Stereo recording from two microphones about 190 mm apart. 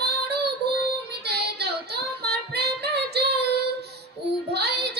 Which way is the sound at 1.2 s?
60° right (ahead or behind).